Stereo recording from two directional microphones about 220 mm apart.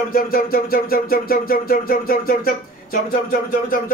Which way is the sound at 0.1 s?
40° left (ahead or behind).